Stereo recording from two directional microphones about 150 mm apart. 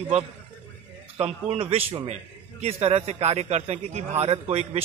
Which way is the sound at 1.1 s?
45° right (ahead or behind).